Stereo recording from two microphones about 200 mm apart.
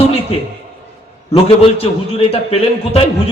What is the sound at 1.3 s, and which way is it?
Speech, 30° left (ahead or behind).